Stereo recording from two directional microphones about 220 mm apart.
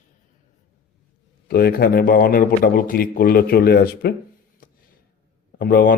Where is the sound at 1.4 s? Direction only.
45° left (ahead or behind).